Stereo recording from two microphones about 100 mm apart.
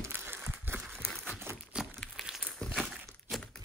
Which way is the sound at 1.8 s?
5° right (ahead or behind).